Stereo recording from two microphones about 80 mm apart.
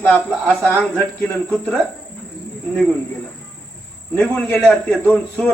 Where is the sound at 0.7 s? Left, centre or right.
Left.